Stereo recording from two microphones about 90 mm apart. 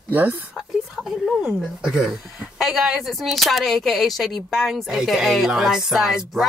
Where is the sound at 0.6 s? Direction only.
Centre (ahead or behind).